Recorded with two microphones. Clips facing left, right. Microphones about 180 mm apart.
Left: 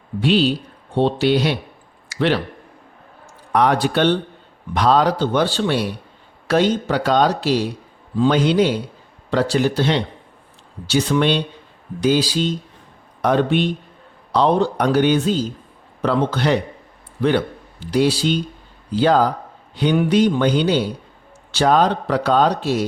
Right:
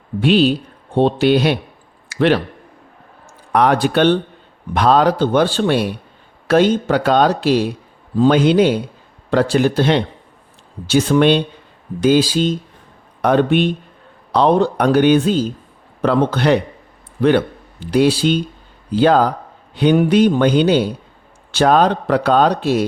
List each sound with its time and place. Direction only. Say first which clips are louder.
0.2 s speech: right 3 dB; 55° right (ahead or behind)
3.5 s a man's voice: right 3 dB; 60° right (ahead or behind)